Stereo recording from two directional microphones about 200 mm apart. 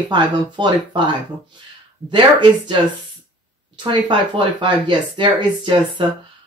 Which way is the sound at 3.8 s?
25° right (ahead or behind).